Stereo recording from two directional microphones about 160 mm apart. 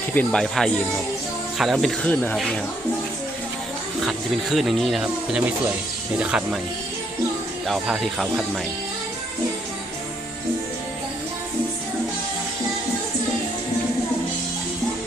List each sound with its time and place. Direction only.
0.1 s speech: 10° left (ahead or behind)
4.0 s speech: centre (ahead or behind)
7.7 s speech: centre (ahead or behind)